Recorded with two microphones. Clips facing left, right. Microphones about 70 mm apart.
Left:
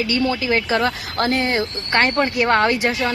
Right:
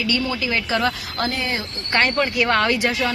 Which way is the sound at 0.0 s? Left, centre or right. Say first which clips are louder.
Left 3 dB; left.